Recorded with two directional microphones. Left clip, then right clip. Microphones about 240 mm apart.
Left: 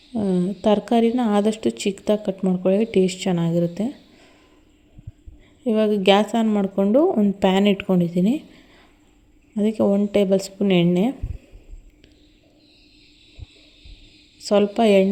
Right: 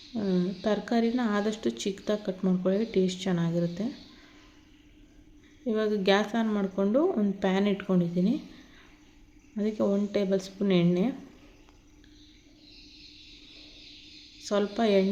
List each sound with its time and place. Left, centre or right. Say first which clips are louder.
0.1 s speech: left 7 dB; left
5.6 s speech: left 8 dB; left
9.6 s speech: left 8 dB; left
14.4 s speech: left 9 dB; left